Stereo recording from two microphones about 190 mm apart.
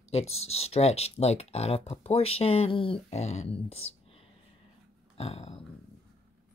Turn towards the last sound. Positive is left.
turn(degrees=30)  # may be behind; listen again after turning